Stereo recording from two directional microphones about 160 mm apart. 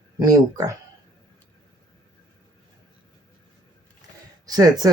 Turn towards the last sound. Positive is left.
turn(degrees=-25)  # may be behind; listen again after turning